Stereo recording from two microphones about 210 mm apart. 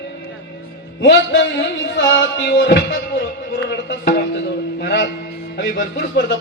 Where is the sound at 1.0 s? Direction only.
60° left (ahead or behind).